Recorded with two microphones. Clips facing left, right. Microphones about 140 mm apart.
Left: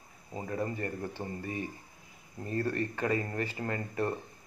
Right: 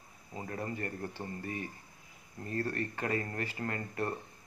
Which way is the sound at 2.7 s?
25° left (ahead or behind).